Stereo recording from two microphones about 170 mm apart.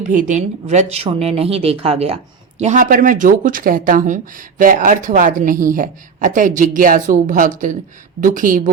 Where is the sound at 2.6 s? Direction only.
45° right (ahead or behind).